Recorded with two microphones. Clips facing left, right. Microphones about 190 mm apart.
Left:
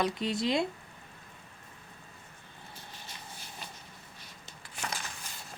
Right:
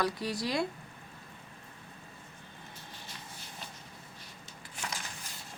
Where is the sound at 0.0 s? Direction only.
20° left (ahead or behind).